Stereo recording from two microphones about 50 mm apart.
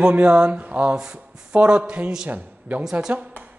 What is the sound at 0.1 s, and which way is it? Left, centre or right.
Speech, right.